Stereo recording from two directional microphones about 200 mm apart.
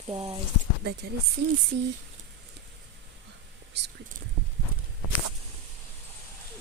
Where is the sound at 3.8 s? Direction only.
60° right (ahead or behind).